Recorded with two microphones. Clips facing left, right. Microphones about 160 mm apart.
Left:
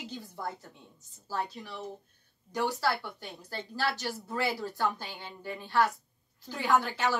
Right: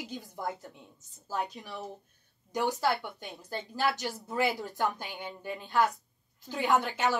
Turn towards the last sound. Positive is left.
turn(degrees=-20)  # may be behind; listen again after turning